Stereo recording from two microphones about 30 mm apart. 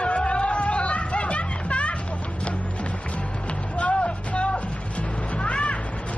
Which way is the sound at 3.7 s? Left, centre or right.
Left.